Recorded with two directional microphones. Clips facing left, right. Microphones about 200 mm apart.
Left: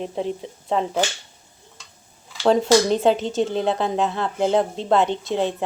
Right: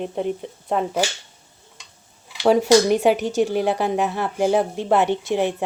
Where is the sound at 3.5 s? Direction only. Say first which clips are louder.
Right 1 dB; 10° right (ahead or behind).